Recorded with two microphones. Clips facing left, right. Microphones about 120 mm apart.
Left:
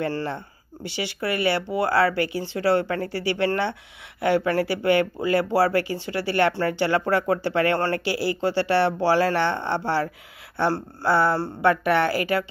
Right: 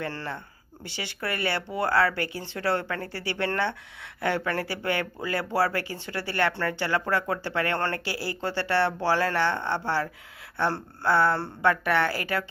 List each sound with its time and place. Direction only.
0.1 s speech: 15° left (ahead or behind)
10.6 s speech: 10° left (ahead or behind)